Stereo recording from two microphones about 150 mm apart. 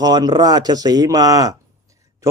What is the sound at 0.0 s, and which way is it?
A man's voice, 25° right (ahead or behind).